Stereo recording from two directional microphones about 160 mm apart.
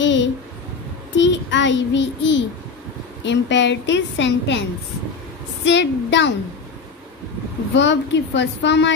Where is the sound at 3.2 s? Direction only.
90° left.